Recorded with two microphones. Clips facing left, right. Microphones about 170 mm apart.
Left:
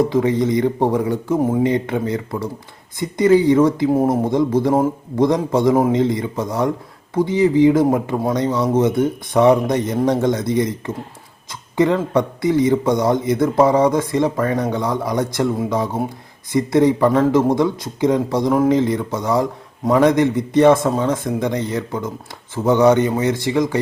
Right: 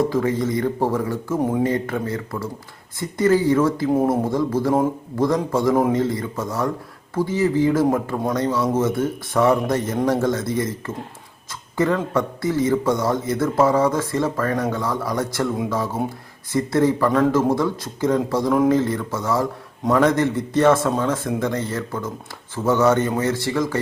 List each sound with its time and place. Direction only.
0.0 s a man's voice: 20° left (ahead or behind)
16.5 s a man's voice: 15° left (ahead or behind)